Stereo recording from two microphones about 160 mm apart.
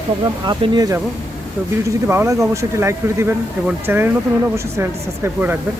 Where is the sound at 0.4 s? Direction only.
25° right (ahead or behind).